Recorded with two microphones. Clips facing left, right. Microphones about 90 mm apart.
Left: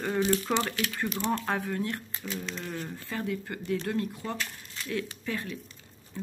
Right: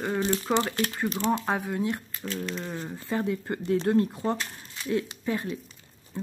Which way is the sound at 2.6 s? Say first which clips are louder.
Right 2 dB; 20° right (ahead or behind).